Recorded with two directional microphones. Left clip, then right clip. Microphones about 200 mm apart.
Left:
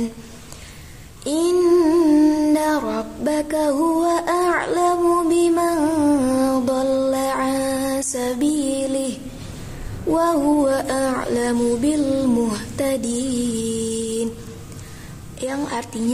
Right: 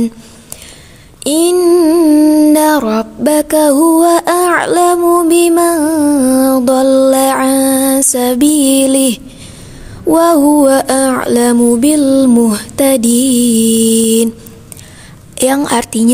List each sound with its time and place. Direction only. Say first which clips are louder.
1.2 s a sound: right 8 dB; 45° right (ahead or behind)
10.0 s child singing: right 10 dB; 40° right (ahead or behind)
13.7 s music: right 13 dB; 40° right (ahead or behind)
15.4 s a woman's voice: right 13 dB; 45° right (ahead or behind)